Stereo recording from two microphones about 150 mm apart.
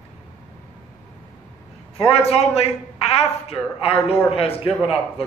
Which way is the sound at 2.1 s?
45° left (ahead or behind).